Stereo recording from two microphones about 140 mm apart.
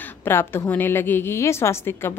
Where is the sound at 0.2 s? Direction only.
15° left (ahead or behind).